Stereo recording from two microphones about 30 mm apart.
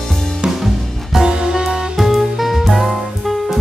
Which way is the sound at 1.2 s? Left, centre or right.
Right.